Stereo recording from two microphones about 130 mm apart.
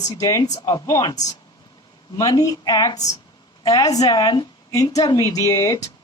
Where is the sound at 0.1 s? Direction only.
25° left (ahead or behind).